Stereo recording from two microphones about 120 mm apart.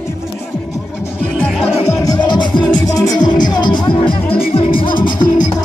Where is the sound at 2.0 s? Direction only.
35° left (ahead or behind).